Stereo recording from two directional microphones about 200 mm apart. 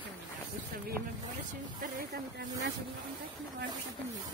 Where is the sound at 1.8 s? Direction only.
45° right (ahead or behind).